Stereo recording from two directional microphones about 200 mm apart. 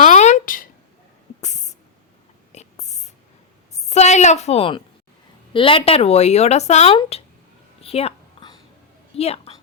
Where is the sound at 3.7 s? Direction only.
35° left (ahead or behind).